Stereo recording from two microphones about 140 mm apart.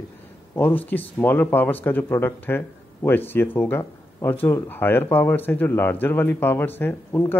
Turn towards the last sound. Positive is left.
turn(degrees=15)  # may be behind; listen again after turning